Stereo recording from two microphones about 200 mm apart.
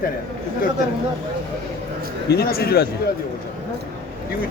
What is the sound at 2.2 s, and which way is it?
Speech, 50° left (ahead or behind).